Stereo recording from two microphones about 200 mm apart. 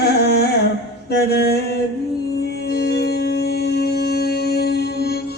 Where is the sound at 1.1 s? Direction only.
55° left (ahead or behind).